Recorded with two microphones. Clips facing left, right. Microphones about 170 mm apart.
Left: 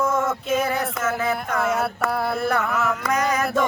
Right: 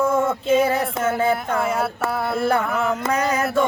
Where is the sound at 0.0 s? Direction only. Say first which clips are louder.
Right 3 dB; 30° right (ahead or behind).